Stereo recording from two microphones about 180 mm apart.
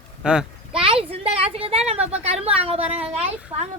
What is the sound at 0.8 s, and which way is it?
A woman's voice, 30° right (ahead or behind).